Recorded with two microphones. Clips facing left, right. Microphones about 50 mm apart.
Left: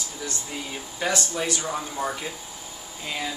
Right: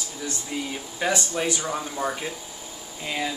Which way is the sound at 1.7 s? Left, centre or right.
Centre.